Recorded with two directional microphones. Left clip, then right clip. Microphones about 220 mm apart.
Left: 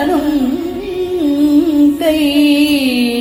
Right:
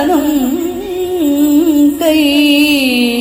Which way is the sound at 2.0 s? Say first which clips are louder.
Right 2 dB; 25° right (ahead or behind).